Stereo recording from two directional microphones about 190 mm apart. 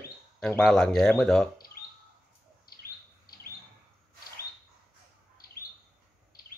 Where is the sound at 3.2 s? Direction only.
50° left (ahead or behind).